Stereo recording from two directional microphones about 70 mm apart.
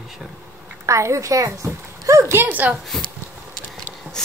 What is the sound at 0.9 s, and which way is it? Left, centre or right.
Speech, right.